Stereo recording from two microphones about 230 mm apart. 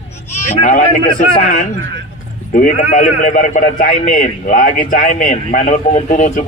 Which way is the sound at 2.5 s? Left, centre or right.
Left.